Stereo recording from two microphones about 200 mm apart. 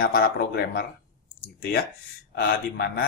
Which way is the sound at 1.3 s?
50° left (ahead or behind).